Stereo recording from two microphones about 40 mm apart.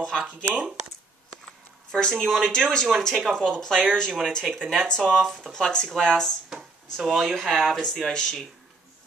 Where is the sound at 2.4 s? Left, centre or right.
Centre.